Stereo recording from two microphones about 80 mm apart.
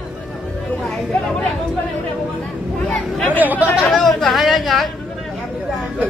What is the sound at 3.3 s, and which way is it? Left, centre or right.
Speech, right.